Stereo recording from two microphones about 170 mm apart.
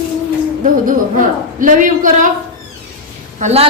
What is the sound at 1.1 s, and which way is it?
Speech, 50° right (ahead or behind).